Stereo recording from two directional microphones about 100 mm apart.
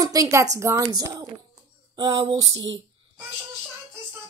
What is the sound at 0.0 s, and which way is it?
Speech, 35° right (ahead or behind).